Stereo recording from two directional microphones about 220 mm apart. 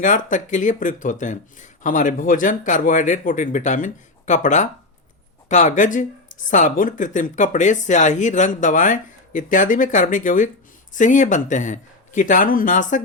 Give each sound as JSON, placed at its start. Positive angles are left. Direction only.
{"t": 0.0, "sound": "speech", "side_deg": 35}